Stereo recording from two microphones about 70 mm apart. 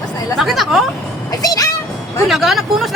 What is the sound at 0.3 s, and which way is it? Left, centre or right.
Speech, centre.